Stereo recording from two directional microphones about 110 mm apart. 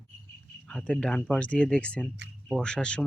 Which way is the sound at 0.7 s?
10° left (ahead or behind).